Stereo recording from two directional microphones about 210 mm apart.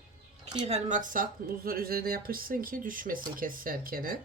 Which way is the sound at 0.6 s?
35° right (ahead or behind).